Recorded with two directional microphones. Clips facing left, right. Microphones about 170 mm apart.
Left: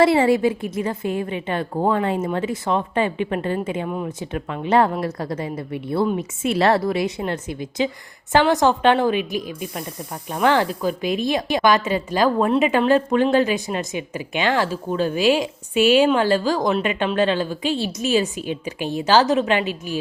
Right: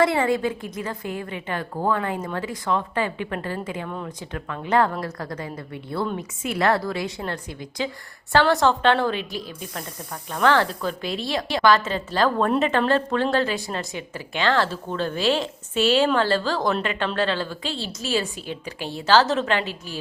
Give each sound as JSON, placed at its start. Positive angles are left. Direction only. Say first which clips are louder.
{"t": 0.0, "sound": "a woman's voice", "louder": "left 5 dB", "side_deg": 25}